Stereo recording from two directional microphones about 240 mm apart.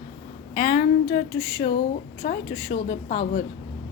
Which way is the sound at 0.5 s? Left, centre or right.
Left.